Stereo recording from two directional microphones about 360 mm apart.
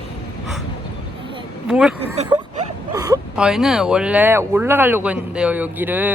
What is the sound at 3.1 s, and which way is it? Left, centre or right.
Speech, centre.